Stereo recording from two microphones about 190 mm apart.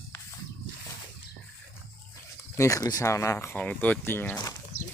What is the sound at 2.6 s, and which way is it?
Speech, 15° left (ahead or behind).